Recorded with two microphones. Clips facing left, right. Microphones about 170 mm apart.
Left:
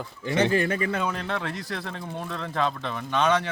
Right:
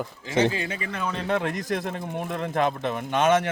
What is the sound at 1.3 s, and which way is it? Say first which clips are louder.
Speech: right 5 dB; 50° right (ahead or behind).